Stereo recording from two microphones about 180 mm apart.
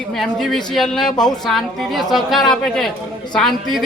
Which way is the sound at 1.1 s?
20° left (ahead or behind).